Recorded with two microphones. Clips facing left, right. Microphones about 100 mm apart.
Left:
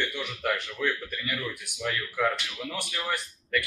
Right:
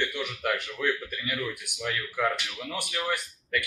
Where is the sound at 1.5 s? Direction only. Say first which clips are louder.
Left 1 dB; 10° right (ahead or behind).